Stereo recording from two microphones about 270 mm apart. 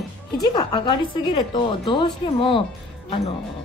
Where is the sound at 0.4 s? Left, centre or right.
Centre.